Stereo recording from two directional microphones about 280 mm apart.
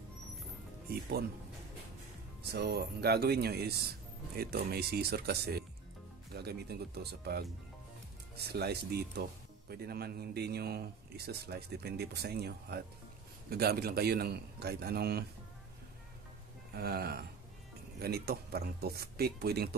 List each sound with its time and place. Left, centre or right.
2.4 s a man's voice: right
16.7 s a man's voice: right